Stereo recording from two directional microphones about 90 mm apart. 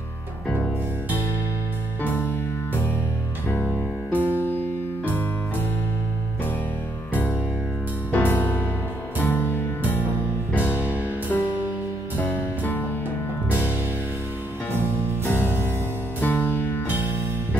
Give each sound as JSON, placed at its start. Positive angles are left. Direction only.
{"t": 2.0, "sound": "music", "side_deg": 20}
{"t": 8.1, "sound": "music", "side_deg": 20}
{"t": 10.5, "sound": "music", "side_deg": -15}
{"t": 12.2, "sound": "music", "side_deg": 20}
{"t": 15.3, "sound": "music", "side_deg": -20}
{"t": 16.2, "sound": "music", "side_deg": 20}